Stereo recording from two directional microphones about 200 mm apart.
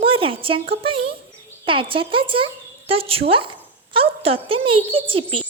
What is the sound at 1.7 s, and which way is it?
Speech, 25° right (ahead or behind).